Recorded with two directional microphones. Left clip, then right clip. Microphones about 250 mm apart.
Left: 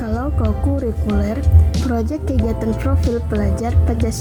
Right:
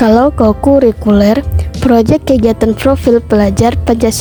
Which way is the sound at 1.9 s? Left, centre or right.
Right.